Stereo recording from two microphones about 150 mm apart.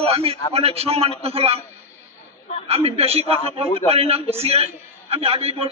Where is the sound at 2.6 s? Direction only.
40° right (ahead or behind).